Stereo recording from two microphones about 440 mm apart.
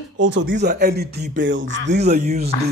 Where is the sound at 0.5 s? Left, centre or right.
Right.